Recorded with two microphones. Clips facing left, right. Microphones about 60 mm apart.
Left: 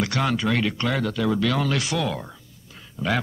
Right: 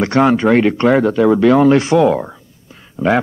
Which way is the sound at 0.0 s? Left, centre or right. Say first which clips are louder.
Right 11 dB; right.